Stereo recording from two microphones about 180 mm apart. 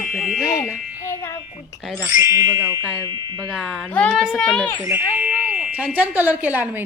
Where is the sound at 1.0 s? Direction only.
15° left (ahead or behind).